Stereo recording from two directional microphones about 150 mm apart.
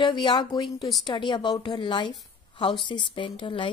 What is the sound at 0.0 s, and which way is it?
A woman's voice, 30° left (ahead or behind).